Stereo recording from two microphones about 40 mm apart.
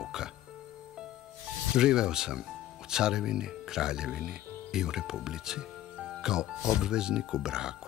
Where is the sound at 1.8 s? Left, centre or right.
Centre.